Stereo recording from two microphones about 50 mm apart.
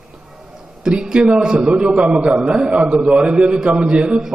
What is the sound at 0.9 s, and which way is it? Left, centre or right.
A man's voice, centre.